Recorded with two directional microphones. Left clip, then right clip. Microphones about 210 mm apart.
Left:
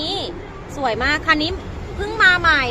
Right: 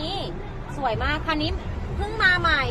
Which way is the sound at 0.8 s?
50° left (ahead or behind).